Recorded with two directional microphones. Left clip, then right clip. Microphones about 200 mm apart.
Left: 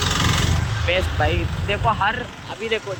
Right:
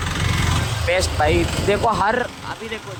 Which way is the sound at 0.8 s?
20° right (ahead or behind).